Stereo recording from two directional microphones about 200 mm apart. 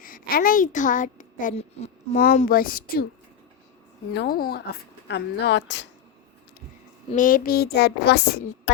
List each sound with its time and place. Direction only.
0.0 s a woman's voice: 45° left (ahead or behind)
4.1 s speech: 50° left (ahead or behind)
7.1 s a woman's voice: 40° left (ahead or behind)